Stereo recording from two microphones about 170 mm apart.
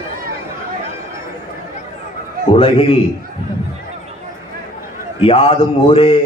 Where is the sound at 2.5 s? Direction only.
30° left (ahead or behind).